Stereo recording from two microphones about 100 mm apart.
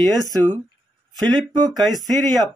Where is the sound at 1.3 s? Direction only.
45° right (ahead or behind).